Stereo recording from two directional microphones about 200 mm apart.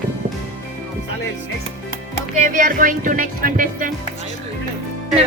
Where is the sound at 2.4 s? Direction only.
40° right (ahead or behind).